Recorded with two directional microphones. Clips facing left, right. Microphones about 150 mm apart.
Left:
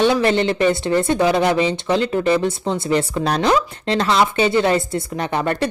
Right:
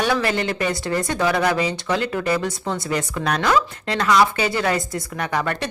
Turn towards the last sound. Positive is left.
turn(degrees=25)  # may be behind; listen again after turning